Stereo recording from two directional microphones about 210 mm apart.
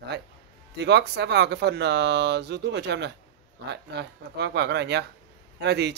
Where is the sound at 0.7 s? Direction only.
55° right (ahead or behind).